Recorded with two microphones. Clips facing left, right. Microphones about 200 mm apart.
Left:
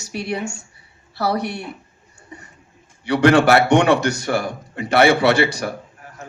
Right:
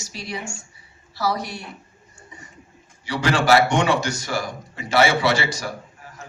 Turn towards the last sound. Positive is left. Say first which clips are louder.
# left 5 dB
turn(degrees=60)  # may be behind; listen again after turning